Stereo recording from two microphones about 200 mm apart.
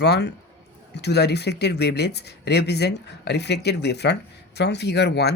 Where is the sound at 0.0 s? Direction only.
55° left (ahead or behind).